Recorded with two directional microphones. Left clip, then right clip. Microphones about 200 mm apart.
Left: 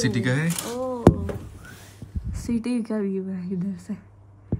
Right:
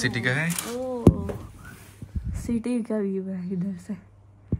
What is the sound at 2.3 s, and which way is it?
Speech, centre (ahead or behind).